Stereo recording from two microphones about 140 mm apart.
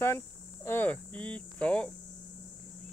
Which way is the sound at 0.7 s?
10° left (ahead or behind).